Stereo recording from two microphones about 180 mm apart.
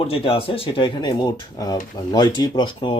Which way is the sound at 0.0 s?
30° left (ahead or behind).